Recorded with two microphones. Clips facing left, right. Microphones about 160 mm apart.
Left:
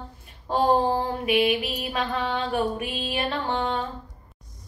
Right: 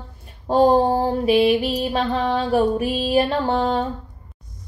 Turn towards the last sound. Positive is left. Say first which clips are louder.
# right 6 dB
turn(degrees=-35)  # may be behind; listen again after turning